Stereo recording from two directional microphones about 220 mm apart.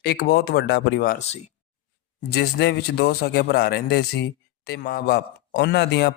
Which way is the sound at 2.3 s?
50° left (ahead or behind).